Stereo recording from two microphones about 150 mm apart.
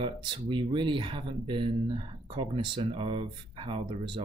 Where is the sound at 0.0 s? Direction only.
35° right (ahead or behind).